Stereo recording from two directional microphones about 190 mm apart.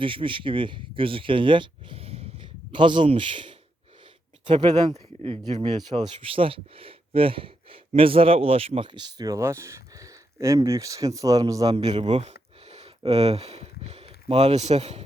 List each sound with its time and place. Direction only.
0.0 s speech: 25° right (ahead or behind)
11.8 s speech: 35° right (ahead or behind)